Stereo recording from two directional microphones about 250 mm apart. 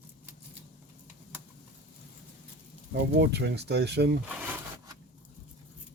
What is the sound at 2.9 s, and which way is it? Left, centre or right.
Speech, right.